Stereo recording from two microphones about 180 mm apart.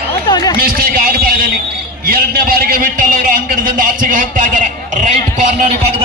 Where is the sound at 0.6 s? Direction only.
55° right (ahead or behind).